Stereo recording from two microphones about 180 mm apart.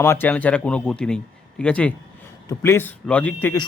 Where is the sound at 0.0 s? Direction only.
10° left (ahead or behind).